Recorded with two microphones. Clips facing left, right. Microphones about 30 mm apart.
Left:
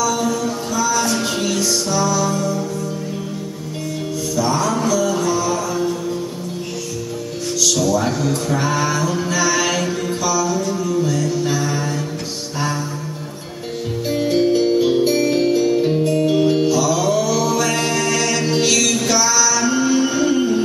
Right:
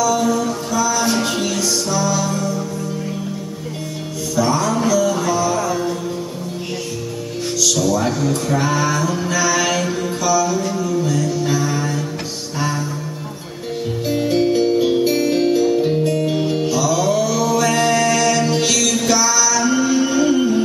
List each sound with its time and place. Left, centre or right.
0.0 s music: centre
4.5 s music: centre
7.6 s music: centre
14.0 s music: centre
16.8 s mantra: centre